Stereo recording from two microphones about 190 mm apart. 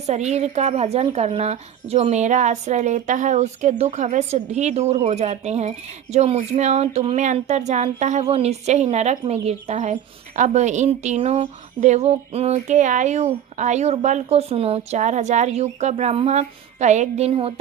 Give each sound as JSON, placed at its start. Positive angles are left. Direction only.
{"t": 0.0, "sound": "a woman's voice", "side_deg": -35}